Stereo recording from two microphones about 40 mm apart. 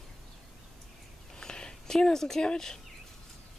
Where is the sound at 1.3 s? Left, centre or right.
Centre.